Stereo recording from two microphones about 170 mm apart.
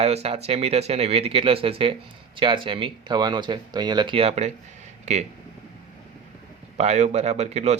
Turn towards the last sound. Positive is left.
turn(degrees=-40)  # may be behind; listen again after turning